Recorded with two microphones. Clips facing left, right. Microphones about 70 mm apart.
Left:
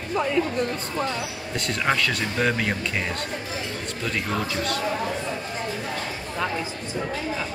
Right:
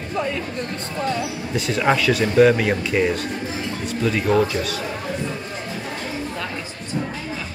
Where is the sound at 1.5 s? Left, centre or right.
Centre.